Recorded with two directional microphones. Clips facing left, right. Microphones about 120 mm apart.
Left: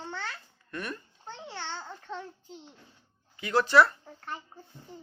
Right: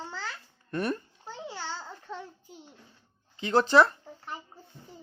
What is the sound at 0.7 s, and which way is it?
Speech, 35° right (ahead or behind).